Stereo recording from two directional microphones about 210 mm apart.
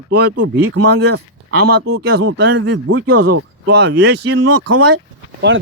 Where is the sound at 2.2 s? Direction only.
65° right (ahead or behind); by 3.4 s 90° right.